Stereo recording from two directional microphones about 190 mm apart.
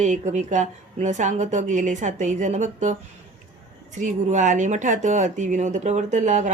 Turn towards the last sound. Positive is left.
turn(degrees=-40)  # may be behind; listen again after turning